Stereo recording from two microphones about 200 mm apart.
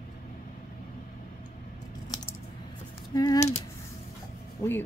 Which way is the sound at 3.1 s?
20° left (ahead or behind).